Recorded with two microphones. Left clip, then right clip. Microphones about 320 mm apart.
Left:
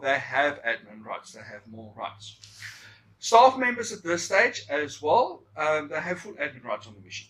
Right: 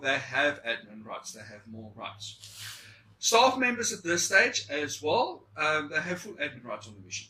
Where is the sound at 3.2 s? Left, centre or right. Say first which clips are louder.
Left 5 dB; left.